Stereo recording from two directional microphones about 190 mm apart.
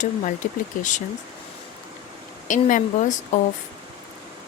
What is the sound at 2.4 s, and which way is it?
Speech, 40° left (ahead or behind).